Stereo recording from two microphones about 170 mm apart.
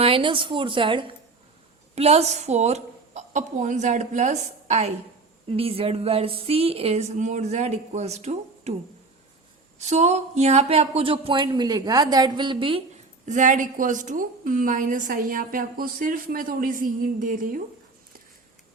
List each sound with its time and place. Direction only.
0.0 s a woman's voice: 30° right (ahead or behind)
9.7 s speech: 40° right (ahead or behind)
13.2 s a woman's voice: 50° right (ahead or behind)